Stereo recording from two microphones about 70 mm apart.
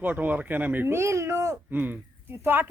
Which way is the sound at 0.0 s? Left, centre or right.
Right.